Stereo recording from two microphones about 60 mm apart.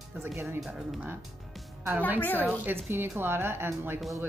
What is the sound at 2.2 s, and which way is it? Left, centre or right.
Speech, left.